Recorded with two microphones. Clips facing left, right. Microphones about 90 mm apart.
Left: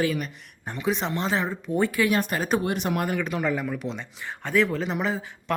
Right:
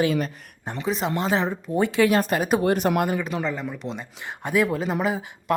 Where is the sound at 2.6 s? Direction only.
40° right (ahead or behind).